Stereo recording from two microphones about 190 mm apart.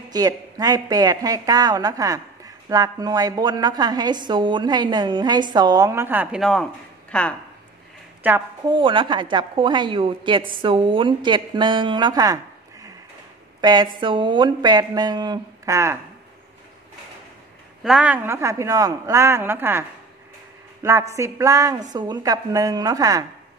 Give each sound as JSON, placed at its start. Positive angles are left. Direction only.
{"t": 0.1, "sound": "a woman's voice", "side_deg": -20}
{"t": 8.2, "sound": "a woman's voice", "side_deg": -10}
{"t": 8.6, "sound": "a woman's voice", "side_deg": -25}
{"t": 13.6, "sound": "a woman's voice", "side_deg": -25}
{"t": 17.8, "sound": "a woman's voice", "side_deg": -5}
{"t": 21.1, "sound": "a woman's voice", "side_deg": -15}